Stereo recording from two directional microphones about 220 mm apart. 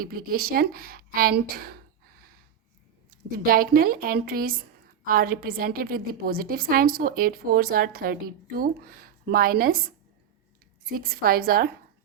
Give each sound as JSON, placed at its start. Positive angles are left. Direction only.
{"t": 0.0, "sound": "a woman's voice", "side_deg": -40}
{"t": 10.8, "sound": "a woman's voice", "side_deg": -40}